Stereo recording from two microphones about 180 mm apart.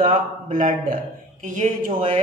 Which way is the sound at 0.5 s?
50° right (ahead or behind).